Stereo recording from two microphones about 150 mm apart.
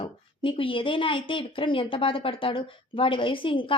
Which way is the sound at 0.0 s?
35° left (ahead or behind).